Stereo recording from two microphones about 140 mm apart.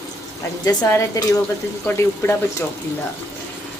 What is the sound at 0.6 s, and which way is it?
Speech, 30° left (ahead or behind).